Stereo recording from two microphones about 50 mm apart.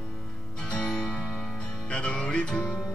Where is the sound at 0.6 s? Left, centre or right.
Left.